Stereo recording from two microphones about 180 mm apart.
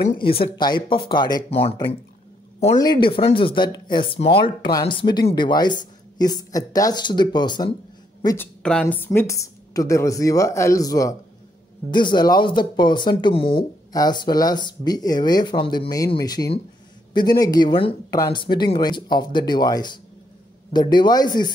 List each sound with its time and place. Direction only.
0.6 s speech: 25° left (ahead or behind)
2.7 s a woman's voice: 20° left (ahead or behind)